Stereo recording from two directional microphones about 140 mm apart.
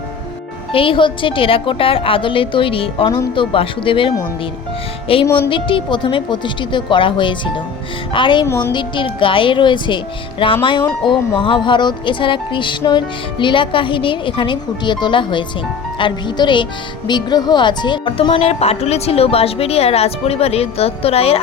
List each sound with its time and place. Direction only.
0.7 s music: 40° left (ahead or behind)
5.2 s speech: 15° left (ahead or behind)
5.5 s music: 35° left (ahead or behind)
8.4 s a woman's voice: 20° left (ahead or behind)
8.7 s music: 35° left (ahead or behind)
17.1 s speech: 30° left (ahead or behind)